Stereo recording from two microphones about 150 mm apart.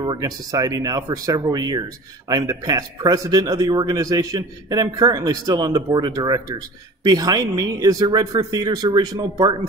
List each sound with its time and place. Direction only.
0.0 s speech: 25° right (ahead or behind)